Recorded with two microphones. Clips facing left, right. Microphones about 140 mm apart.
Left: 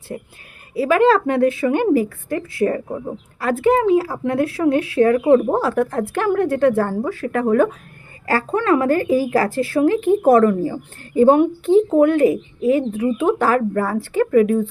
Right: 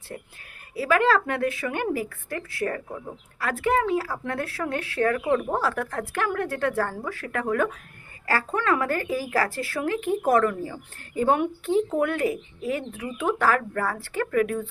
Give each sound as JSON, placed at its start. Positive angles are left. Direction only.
{"t": 0.1, "sound": "a woman's voice", "side_deg": 20}